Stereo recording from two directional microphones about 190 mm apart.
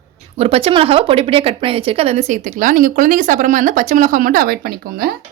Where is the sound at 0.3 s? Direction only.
30° right (ahead or behind); by 5.1 s 55° right (ahead or behind).